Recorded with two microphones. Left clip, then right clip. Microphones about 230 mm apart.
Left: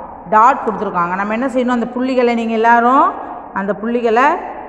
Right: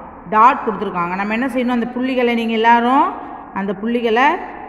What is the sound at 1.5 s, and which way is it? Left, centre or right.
A woman's voice, centre.